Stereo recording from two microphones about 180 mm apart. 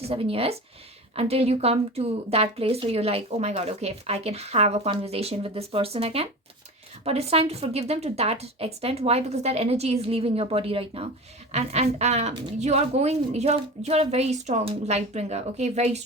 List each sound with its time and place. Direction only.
0.0 s speech: 30° right (ahead or behind)